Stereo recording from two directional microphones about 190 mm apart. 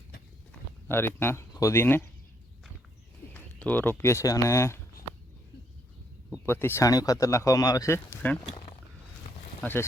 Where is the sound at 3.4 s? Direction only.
10° left (ahead or behind).